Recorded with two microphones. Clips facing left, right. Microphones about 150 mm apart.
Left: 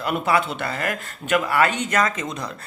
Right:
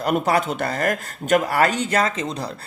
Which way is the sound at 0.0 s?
40° right (ahead or behind).